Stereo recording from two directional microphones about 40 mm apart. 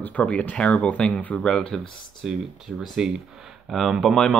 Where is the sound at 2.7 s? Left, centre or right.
Right.